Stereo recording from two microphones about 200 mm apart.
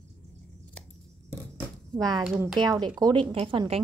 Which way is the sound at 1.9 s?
20° right (ahead or behind).